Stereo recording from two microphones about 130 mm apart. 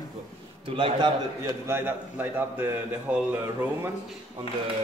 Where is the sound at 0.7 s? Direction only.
40° right (ahead or behind).